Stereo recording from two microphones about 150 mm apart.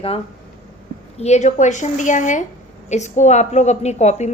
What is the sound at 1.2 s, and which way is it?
A woman's voice, 50° left (ahead or behind).